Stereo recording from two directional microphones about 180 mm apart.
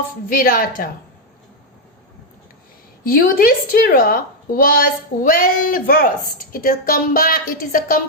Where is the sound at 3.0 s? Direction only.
50° left (ahead or behind).